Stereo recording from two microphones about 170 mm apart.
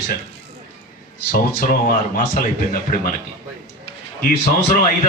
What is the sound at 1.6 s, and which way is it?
A man's voice, 55° left (ahead or behind).